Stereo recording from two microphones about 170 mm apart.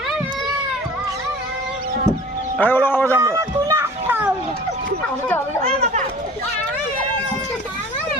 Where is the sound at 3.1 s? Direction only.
20° right (ahead or behind).